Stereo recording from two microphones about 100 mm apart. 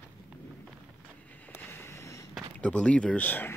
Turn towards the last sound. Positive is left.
turn(degrees=15)  # may be behind; listen again after turning